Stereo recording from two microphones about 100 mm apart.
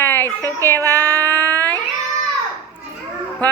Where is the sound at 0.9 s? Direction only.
20° left (ahead or behind).